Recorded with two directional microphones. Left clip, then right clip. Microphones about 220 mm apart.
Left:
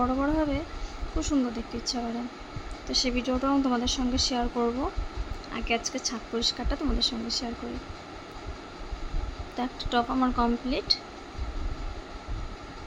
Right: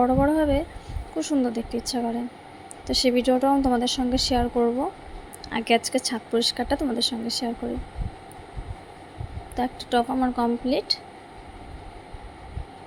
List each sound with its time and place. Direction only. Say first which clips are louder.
0.0 s speech: right 6 dB; 15° right (ahead or behind)
5.5 s speech: right 8 dB; 20° right (ahead or behind)
9.6 s speech: right 4 dB; 10° right (ahead or behind)